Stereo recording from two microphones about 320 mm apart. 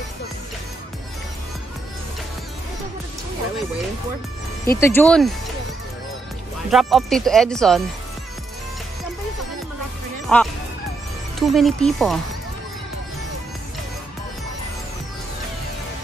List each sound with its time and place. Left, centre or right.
4.7 s speech: centre
6.7 s speech: centre
10.2 s speech: centre